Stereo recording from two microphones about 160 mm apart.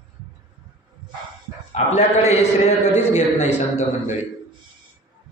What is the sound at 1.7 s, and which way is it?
A man's voice, 45° left (ahead or behind).